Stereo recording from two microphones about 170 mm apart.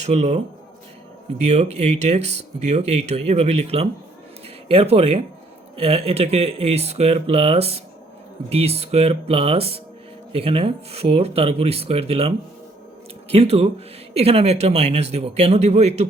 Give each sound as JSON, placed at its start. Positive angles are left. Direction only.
{"t": 0.0, "sound": "speech", "side_deg": -40}
{"t": 13.3, "sound": "speech", "side_deg": -35}